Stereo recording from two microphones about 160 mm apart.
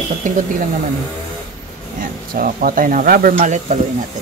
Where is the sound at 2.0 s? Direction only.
60° right (ahead or behind).